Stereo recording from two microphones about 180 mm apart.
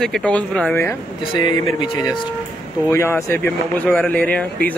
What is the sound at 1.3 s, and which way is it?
Speech, 25° left (ahead or behind).